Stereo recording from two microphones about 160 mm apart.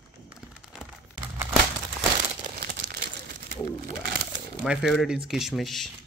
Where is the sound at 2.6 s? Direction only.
80° right.